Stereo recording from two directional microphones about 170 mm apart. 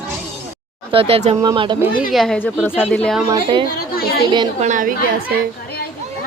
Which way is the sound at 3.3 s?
30° right (ahead or behind).